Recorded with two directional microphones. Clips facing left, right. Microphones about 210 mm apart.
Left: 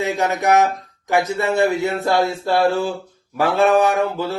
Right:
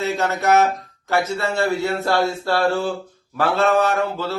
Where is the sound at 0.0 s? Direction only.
15° left (ahead or behind).